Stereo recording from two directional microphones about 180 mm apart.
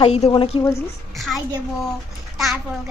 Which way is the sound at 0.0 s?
30° left (ahead or behind).